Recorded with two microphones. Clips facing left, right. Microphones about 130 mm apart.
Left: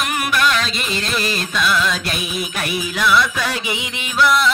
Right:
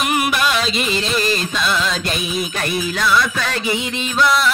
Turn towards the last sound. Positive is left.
turn(degrees=15)  # may be behind; listen again after turning